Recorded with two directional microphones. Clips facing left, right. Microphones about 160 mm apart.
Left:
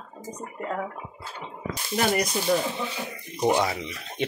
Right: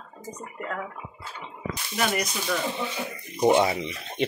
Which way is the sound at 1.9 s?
35° left (ahead or behind).